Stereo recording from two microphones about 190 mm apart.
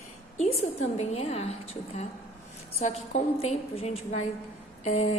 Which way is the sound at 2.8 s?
35° left (ahead or behind).